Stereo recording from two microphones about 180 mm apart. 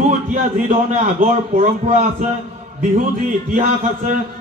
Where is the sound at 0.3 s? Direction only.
45° right (ahead or behind).